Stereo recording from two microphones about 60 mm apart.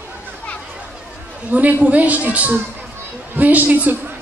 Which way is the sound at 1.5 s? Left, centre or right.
Right.